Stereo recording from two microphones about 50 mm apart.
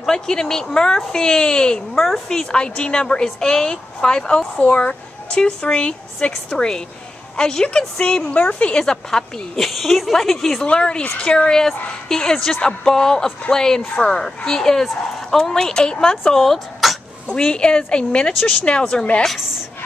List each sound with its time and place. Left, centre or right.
0.0 s a woman's voice: centre
9.7 s speech: centre
10.6 s a woman's voice: centre
11.5 s speech: centre
16.3 s speech: centre
17.3 s a woman's voice: centre